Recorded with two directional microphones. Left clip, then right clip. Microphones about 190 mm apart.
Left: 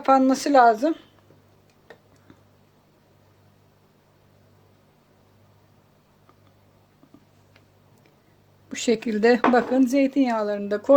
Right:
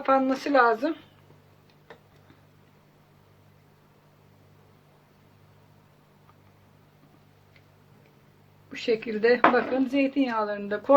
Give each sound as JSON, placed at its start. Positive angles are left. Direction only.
{"t": 0.0, "sound": "a woman's voice", "side_deg": 35}
{"t": 8.7, "sound": "speech", "side_deg": 55}